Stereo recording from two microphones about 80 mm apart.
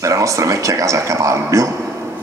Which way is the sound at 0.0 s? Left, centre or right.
Right.